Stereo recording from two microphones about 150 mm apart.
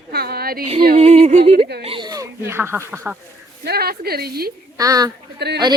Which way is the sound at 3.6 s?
90° right.